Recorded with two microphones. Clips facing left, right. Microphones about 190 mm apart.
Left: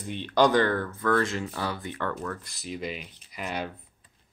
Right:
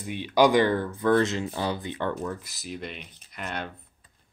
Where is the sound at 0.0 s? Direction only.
10° right (ahead or behind).